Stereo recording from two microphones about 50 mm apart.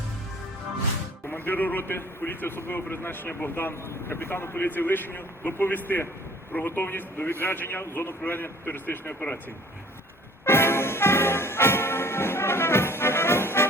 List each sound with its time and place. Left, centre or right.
1.3 s a man's voice: left
10.4 s music: left